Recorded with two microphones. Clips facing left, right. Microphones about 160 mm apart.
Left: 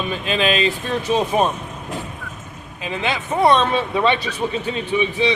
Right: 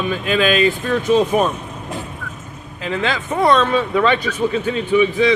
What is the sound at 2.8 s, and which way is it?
Speech, 15° left (ahead or behind).